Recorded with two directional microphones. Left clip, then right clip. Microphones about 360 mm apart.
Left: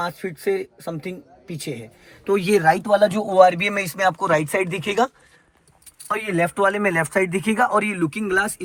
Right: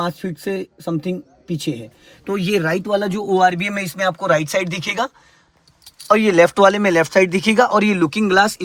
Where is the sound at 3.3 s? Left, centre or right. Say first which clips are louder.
Right 1 dB; centre.